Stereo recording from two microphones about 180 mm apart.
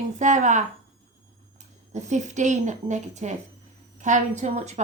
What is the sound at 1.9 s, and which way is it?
A woman's voice, 40° right (ahead or behind).